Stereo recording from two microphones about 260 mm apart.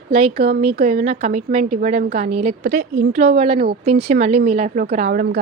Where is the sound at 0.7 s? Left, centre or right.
Right.